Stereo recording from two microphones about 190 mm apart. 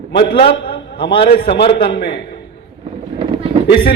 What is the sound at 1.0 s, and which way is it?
Speech, 25° left (ahead or behind).